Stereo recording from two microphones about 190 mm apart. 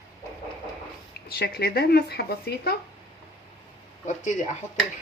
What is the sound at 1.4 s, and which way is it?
Speech, 55° left (ahead or behind).